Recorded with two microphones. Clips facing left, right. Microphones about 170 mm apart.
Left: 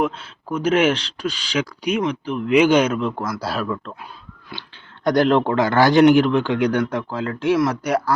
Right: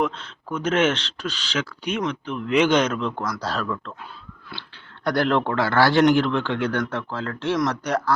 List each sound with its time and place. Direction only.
0.0 s speech: 10° left (ahead or behind)